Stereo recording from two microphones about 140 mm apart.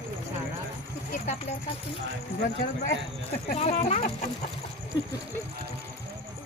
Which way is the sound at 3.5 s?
50° left (ahead or behind).